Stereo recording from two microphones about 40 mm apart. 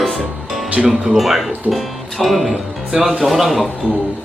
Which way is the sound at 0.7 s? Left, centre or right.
Right.